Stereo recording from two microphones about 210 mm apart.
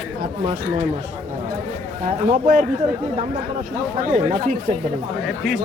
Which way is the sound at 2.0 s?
40° right (ahead or behind).